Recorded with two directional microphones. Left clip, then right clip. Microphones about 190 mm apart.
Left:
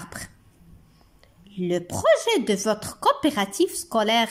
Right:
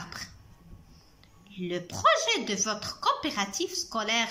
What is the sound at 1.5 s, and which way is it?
A woman's voice, 30° left (ahead or behind).